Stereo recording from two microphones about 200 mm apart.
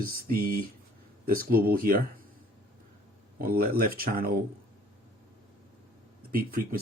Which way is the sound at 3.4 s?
50° right (ahead or behind).